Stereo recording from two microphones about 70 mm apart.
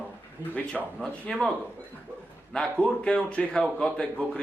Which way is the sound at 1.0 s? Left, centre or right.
Centre.